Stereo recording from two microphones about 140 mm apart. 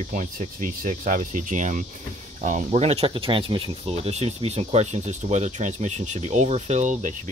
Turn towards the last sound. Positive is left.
turn(degrees=-60)  # may be behind; listen again after turning